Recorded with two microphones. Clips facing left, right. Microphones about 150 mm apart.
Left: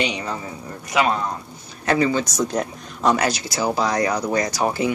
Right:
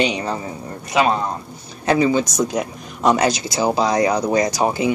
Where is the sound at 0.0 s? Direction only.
30° right (ahead or behind).